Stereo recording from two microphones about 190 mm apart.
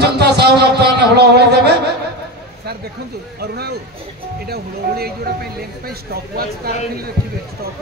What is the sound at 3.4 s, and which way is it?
A man's voice, 55° right (ahead or behind).